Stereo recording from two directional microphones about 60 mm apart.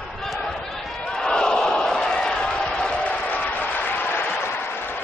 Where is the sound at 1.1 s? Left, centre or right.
Centre.